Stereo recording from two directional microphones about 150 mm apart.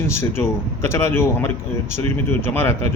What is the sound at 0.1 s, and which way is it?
A man's voice, 15° left (ahead or behind).